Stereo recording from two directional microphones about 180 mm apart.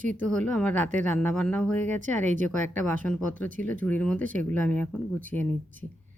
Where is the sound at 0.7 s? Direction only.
40° right (ahead or behind).